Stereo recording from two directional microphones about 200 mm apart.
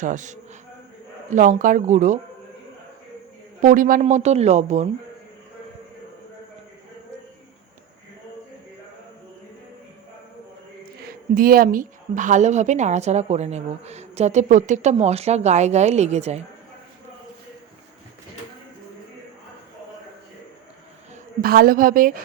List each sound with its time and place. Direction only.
0.0 s a woman's voice: 40° right (ahead or behind)
3.6 s a woman's voice: 40° right (ahead or behind)
11.3 s a woman's voice: 45° right (ahead or behind)
21.4 s a woman's voice: 50° right (ahead or behind)